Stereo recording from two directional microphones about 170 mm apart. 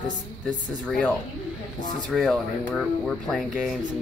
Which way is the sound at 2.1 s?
Centre (ahead or behind).